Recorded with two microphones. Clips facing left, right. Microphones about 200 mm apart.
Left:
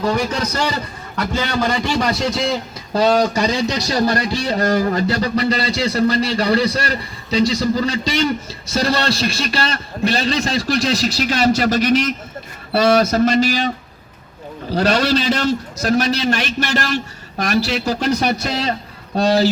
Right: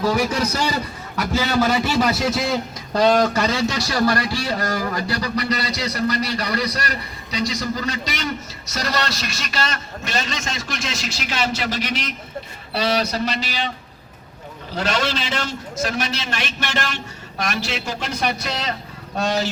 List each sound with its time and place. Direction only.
0.0 s a man's voice: 5° right (ahead or behind); by 13.7 s 45° left (ahead or behind)
14.8 s a man's voice: 40° left (ahead or behind)